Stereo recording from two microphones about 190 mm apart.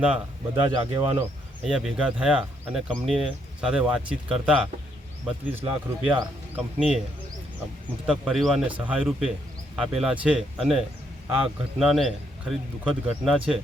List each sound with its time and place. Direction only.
0.6 s speech: 25° right (ahead or behind)
1.2 s speech: 5° right (ahead or behind)
8.0 s speech: 5° right (ahead or behind)